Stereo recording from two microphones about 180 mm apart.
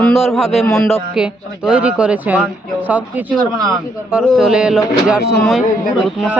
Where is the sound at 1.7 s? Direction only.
5° right (ahead or behind).